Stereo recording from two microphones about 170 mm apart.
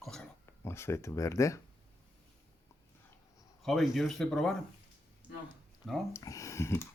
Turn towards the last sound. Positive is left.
turn(degrees=15)  # may be behind; listen again after turning